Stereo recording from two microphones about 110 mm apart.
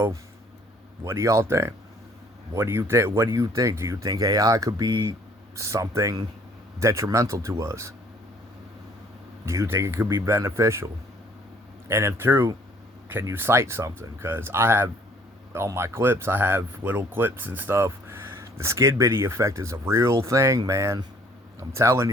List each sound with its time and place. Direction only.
1.0 s speech: 25° right (ahead or behind)
5.5 s speech: 25° right (ahead or behind)
9.5 s speech: 25° right (ahead or behind)
11.9 s speech: 25° right (ahead or behind)